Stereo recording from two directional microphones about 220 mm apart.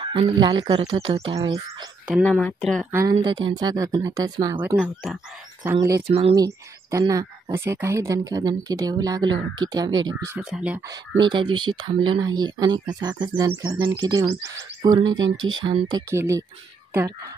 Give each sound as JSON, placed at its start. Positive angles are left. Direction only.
{"t": 0.0, "sound": "speech", "side_deg": -25}
{"t": 2.0, "sound": "speech", "side_deg": 0}
{"t": 2.9, "sound": "speech", "side_deg": -10}
{"t": 3.2, "sound": "speech", "side_deg": -20}
{"t": 5.8, "sound": "speech", "side_deg": -15}
{"t": 6.0, "sound": "speech", "side_deg": -30}
{"t": 6.3, "sound": "speech", "side_deg": -15}
{"t": 10.9, "sound": "speech", "side_deg": -20}